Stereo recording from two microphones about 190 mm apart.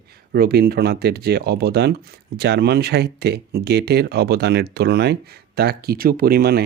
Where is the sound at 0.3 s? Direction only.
55° right (ahead or behind).